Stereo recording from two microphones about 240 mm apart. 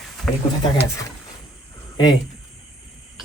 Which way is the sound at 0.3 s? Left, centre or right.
Centre.